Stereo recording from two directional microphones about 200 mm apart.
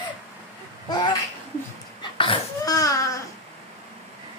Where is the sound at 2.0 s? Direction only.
25° left (ahead or behind).